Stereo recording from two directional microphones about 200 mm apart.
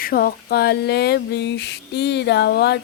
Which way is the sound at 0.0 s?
45° left (ahead or behind).